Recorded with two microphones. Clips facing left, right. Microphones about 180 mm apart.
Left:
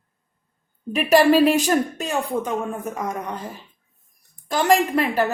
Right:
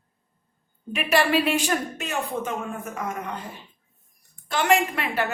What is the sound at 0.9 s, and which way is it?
A woman's voice, 40° left (ahead or behind).